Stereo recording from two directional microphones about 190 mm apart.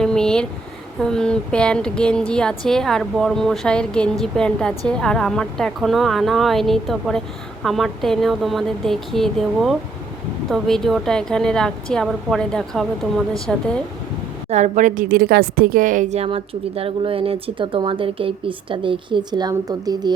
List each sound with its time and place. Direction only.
0.0 s a sound: 5° left (ahead or behind)
0.9 s speech: 5° left (ahead or behind)
14.5 s a woman's voice: 40° right (ahead or behind); by 20.1 s 20° right (ahead or behind)